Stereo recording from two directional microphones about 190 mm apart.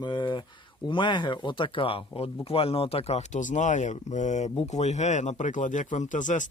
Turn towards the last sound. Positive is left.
turn(degrees=40)  # may be behind; listen again after turning